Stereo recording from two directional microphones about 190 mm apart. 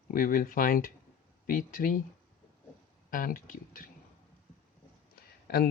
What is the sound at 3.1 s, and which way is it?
Speech, 45° left (ahead or behind).